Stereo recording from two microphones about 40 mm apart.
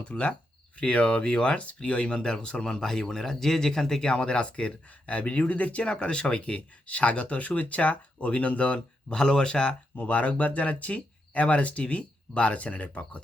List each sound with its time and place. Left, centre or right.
0.0 s speech: left
9.1 s speech: centre
9.9 s speech: left